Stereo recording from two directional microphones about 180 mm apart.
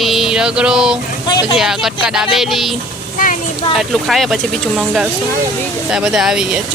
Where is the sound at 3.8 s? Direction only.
Centre (ahead or behind).